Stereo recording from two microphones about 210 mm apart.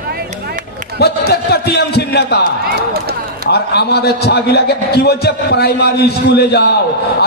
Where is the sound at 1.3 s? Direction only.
50° left (ahead or behind).